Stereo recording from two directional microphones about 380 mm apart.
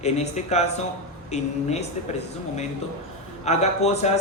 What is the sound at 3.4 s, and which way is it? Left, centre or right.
Speech, centre.